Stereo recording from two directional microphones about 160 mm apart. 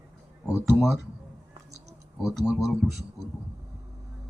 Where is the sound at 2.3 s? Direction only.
Centre (ahead or behind).